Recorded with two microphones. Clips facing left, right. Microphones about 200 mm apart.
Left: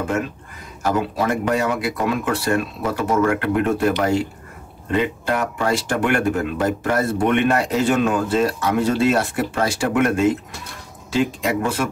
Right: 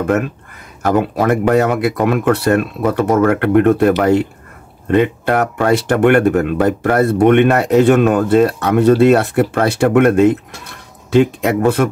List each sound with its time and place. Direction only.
0.8 s speech: 60° right (ahead or behind)